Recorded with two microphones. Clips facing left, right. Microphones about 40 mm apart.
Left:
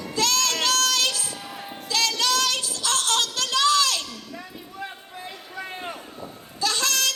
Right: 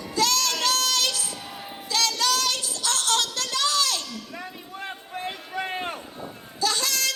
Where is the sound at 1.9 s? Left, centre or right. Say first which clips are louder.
Left 1 dB; left.